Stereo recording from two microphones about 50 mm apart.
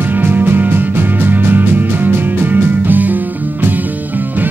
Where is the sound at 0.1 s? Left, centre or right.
Right.